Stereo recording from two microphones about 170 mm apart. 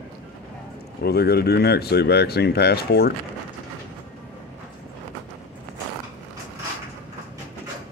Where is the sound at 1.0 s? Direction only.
70° left (ahead or behind).